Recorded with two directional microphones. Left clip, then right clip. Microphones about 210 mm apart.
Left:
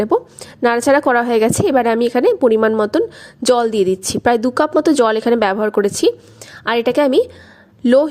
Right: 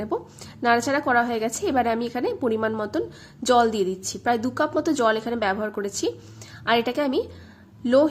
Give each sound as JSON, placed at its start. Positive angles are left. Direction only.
{"t": 0.0, "sound": "a woman's voice", "side_deg": 40}